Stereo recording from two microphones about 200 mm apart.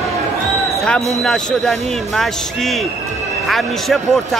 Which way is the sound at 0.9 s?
Centre (ahead or behind).